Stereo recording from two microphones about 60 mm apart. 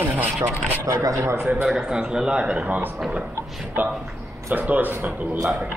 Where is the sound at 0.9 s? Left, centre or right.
Right.